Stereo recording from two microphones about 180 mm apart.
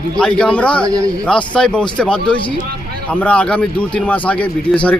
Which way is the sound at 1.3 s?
5° left (ahead or behind).